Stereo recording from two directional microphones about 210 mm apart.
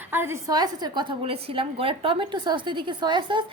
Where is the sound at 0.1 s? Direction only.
10° right (ahead or behind).